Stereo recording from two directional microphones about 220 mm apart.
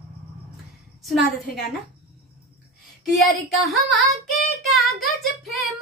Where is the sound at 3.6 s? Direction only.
Centre (ahead or behind).